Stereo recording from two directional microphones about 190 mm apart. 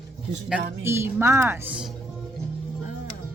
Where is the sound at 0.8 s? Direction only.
15° right (ahead or behind).